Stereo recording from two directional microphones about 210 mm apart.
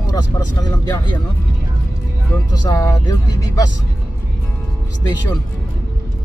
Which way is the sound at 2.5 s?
20° left (ahead or behind).